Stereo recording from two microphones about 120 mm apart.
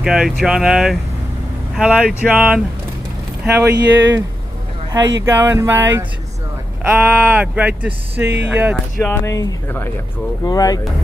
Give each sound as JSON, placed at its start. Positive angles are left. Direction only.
{"t": 0.0, "sound": "speech", "side_deg": -5}
{"t": 3.4, "sound": "speech", "side_deg": -20}
{"t": 5.2, "sound": "speech", "side_deg": -20}
{"t": 9.0, "sound": "speech", "side_deg": 25}